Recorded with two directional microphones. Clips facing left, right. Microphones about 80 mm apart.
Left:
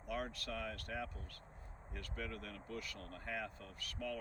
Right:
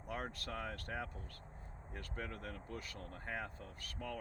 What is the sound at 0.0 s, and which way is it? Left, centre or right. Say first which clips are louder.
Speech: left 1 dB; right.